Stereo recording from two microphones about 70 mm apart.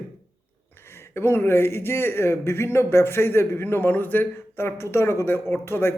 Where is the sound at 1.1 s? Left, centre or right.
Left.